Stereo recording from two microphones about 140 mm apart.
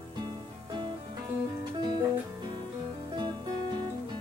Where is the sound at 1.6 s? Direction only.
30° right (ahead or behind).